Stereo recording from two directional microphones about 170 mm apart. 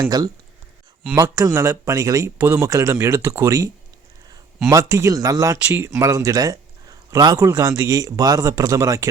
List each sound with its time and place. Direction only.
0.0 s speech: 20° right (ahead or behind)
4.7 s speech: 15° right (ahead or behind)